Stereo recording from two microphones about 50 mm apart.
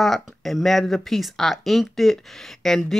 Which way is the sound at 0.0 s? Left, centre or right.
Centre.